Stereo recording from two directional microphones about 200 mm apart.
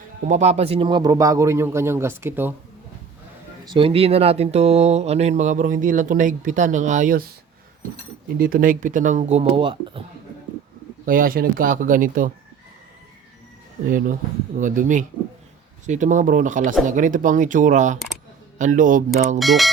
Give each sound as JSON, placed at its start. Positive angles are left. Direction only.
{"t": 0.3, "sound": "speech", "side_deg": -35}
{"t": 3.7, "sound": "speech", "side_deg": -25}
{"t": 8.4, "sound": "speech", "side_deg": -45}
{"t": 11.0, "sound": "speech", "side_deg": -45}
{"t": 13.8, "sound": "speech", "side_deg": -45}
{"t": 19.4, "sound": "speech", "side_deg": 0}